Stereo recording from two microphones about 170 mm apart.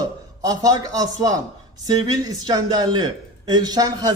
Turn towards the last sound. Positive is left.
turn(degrees=-20)  # may be behind; listen again after turning